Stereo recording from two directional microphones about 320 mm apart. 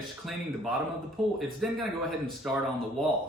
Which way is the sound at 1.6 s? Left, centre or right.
Centre.